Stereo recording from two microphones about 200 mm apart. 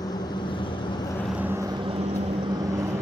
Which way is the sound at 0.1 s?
20° left (ahead or behind).